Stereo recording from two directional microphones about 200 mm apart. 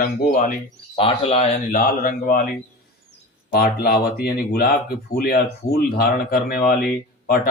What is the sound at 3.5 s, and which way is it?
Speech, 50° left (ahead or behind).